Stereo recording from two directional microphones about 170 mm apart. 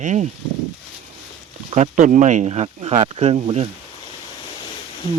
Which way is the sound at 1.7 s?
45° right (ahead or behind).